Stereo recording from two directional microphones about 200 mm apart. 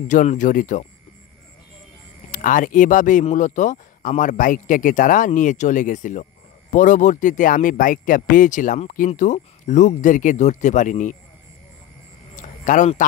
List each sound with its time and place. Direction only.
0.1 s speech: 40° left (ahead or behind)
2.3 s speech: 40° left (ahead or behind)
12.4 s a sound: 40° left (ahead or behind)